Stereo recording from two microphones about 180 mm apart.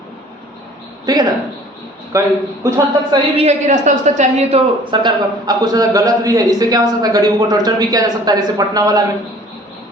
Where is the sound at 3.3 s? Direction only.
40° right (ahead or behind); by 9.0 s 20° right (ahead or behind).